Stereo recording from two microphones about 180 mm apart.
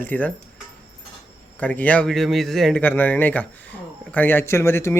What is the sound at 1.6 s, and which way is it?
A man's voice, 10° left (ahead or behind).